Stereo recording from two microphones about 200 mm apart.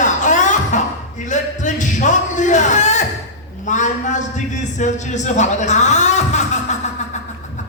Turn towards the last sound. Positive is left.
turn(degrees=35)  # may be behind; listen again after turning